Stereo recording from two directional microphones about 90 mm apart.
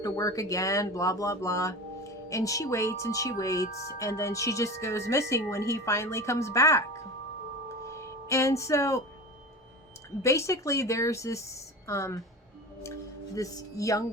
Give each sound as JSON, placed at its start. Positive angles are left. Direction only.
{"t": 0.0, "sound": "speech", "side_deg": 40}
{"t": 10.2, "sound": "speech", "side_deg": 35}
{"t": 13.3, "sound": "speech", "side_deg": 40}